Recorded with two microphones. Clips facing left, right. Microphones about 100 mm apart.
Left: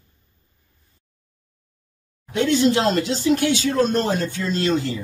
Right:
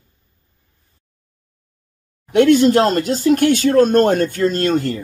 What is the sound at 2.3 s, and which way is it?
Speech, 60° right (ahead or behind).